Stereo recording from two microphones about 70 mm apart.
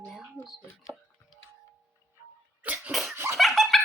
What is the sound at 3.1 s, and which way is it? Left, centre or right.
Laughter, right.